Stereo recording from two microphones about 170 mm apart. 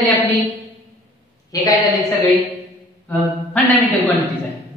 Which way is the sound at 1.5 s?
20° left (ahead or behind).